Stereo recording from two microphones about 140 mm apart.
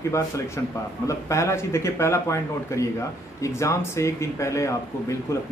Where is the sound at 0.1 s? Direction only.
20° left (ahead or behind).